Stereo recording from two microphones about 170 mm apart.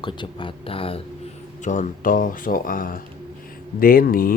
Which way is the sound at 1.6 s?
45° left (ahead or behind).